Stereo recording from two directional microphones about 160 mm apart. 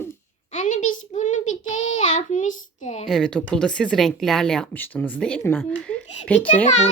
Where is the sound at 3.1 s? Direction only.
5° left (ahead or behind).